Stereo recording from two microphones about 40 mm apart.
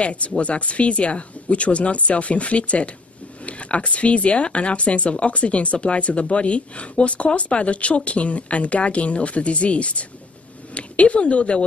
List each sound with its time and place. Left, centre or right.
0.0 s speech: left